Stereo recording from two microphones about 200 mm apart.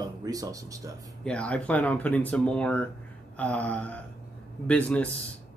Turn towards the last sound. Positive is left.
turn(degrees=5)  # may be behind; listen again after turning